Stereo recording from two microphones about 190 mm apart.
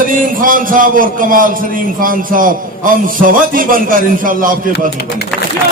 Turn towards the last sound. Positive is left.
turn(degrees=5)  # may be behind; listen again after turning